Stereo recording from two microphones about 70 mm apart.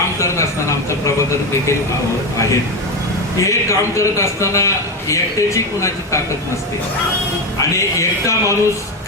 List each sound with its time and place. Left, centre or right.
3.4 s a man's voice: left
7.9 s a man's voice: left